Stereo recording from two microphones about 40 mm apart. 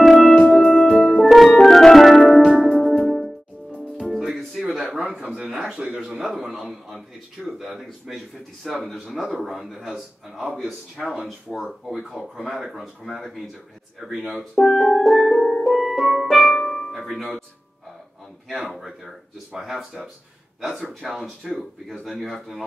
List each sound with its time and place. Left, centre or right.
0.1 s music: centre
5.4 s speech: centre
5.9 s a man's voice: right
6.2 s a man's voice: centre
6.6 s a man's voice: centre
8.8 s a man's voice: centre
9.1 s a man's voice: centre
11.9 s a man's voice: centre
14.6 s music: centre
17.0 s speech: centre
18.7 s a man's voice: centre